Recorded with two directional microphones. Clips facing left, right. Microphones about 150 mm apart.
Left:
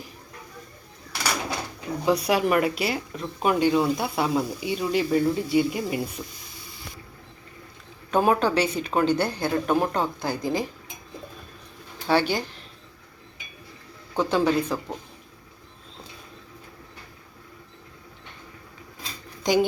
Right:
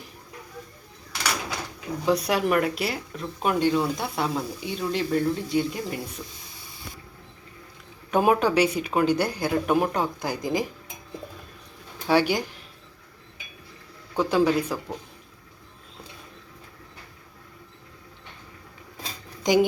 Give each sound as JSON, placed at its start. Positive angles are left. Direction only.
{"t": 2.0, "sound": "speech", "side_deg": 5}
{"t": 6.2, "sound": "speech", "side_deg": 20}
{"t": 8.1, "sound": "speech", "side_deg": -15}
{"t": 12.0, "sound": "speech", "side_deg": -15}
{"t": 14.2, "sound": "speech", "side_deg": -5}
{"t": 19.4, "sound": "a woman's voice", "side_deg": -15}